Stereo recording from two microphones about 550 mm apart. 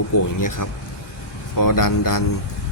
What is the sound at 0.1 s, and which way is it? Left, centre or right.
A man's voice, left.